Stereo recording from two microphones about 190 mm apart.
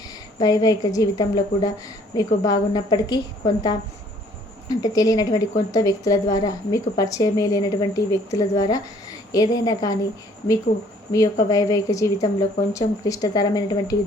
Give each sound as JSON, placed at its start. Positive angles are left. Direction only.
{"t": 0.0, "sound": "a woman's voice", "side_deg": 20}
{"t": 4.8, "sound": "a woman's voice", "side_deg": 20}
{"t": 11.4, "sound": "a woman's voice", "side_deg": 20}